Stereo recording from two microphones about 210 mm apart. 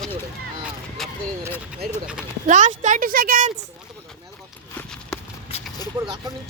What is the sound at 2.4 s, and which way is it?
A woman's voice, 35° right (ahead or behind).